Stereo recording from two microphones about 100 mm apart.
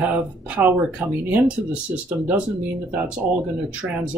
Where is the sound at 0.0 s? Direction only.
15° right (ahead or behind).